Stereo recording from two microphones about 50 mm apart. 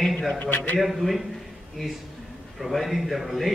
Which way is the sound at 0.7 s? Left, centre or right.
Centre.